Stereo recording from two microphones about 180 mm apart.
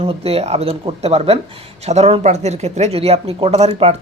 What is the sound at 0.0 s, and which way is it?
Speech, 35° right (ahead or behind).